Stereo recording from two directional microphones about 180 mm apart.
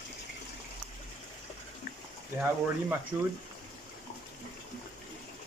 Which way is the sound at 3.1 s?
10° right (ahead or behind).